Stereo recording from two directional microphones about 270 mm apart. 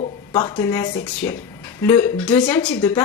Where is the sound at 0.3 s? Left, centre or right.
Centre.